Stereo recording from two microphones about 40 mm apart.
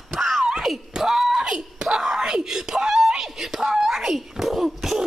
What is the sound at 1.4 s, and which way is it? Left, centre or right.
Screaming, centre.